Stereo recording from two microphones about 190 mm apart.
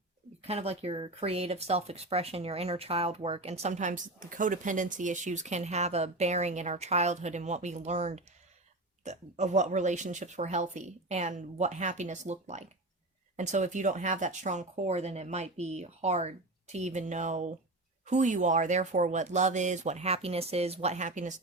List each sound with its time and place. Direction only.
0.4 s speech: 30° right (ahead or behind)